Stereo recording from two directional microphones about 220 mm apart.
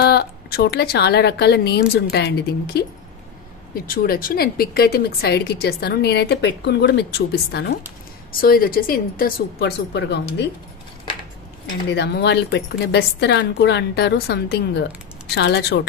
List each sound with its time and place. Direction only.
0.0 s a woman's voice: 45° left (ahead or behind)
11.9 s a woman's voice: 50° left (ahead or behind)